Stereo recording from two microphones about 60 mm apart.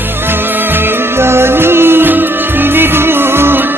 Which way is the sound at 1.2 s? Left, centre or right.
Right.